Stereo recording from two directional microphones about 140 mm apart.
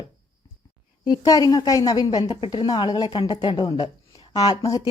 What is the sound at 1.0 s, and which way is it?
A woman's voice, 30° left (ahead or behind).